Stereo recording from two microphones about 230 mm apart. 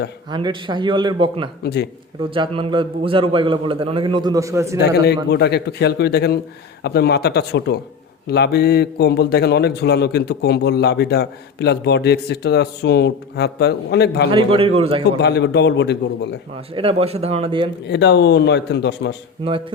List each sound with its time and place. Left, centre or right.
0.3 s a man's voice: centre
1.6 s a man's voice: left
2.3 s a man's voice: right
5.0 s a man's voice: left
14.3 s a man's voice: right
15.2 s a man's voice: left
16.7 s a man's voice: right
17.8 s a man's voice: left